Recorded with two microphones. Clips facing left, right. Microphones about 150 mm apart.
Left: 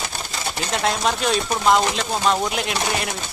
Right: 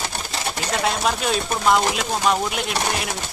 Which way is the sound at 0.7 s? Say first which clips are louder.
Left 1 dB; centre (ahead or behind).